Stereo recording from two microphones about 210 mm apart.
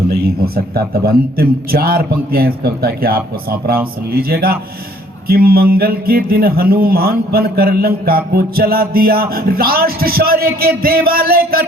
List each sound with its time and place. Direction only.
0.1 s speech: 45° right (ahead or behind)